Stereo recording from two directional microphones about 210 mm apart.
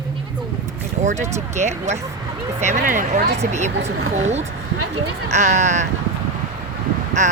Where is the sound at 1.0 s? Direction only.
35° right (ahead or behind).